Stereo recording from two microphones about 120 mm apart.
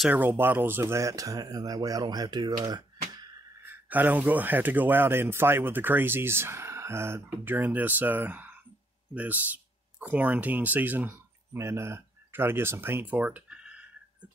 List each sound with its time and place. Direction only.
0.1 s speech: 15° right (ahead or behind); by 3.3 s 35° right (ahead or behind)
3.6 s speech: 15° right (ahead or behind)